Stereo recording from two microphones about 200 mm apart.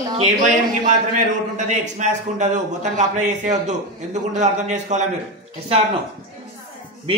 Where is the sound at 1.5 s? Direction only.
35° right (ahead or behind).